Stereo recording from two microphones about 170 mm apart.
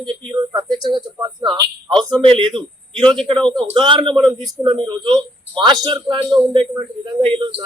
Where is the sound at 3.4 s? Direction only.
Centre (ahead or behind).